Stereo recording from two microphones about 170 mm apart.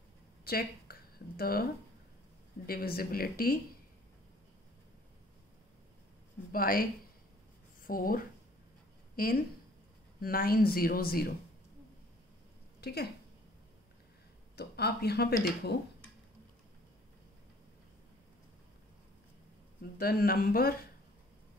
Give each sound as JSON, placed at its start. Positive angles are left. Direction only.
{"t": 0.5, "sound": "speech", "side_deg": 60}
{"t": 6.5, "sound": "speech", "side_deg": 60}
{"t": 12.8, "sound": "speech", "side_deg": 70}
{"t": 14.5, "sound": "speech", "side_deg": 75}
{"t": 20.0, "sound": "speech", "side_deg": 65}